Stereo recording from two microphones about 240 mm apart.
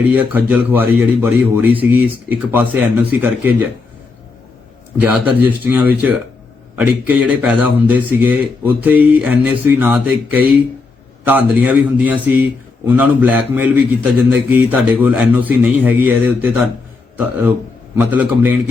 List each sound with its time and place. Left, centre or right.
0.1 s speech: centre
4.9 s speech: centre
17.9 s speech: centre